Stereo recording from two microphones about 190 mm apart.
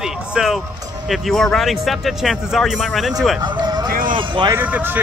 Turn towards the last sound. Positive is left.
turn(degrees=-10)  # may be behind; listen again after turning